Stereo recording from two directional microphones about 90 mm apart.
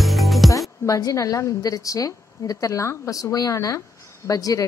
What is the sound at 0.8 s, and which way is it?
A woman's voice, 40° left (ahead or behind).